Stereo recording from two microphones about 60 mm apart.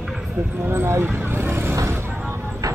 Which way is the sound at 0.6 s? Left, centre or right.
Right.